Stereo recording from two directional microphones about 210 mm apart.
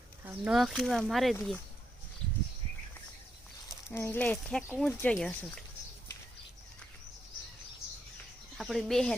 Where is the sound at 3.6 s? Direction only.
10° left (ahead or behind).